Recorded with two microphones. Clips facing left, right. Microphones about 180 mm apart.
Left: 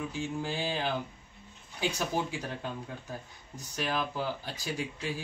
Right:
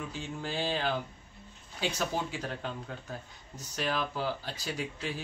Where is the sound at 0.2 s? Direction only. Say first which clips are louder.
Left 1 dB; 15° left (ahead or behind).